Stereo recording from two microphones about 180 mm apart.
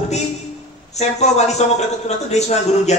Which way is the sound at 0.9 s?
40° left (ahead or behind).